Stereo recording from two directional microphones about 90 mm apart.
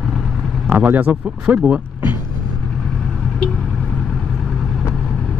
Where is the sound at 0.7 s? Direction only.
20° right (ahead or behind).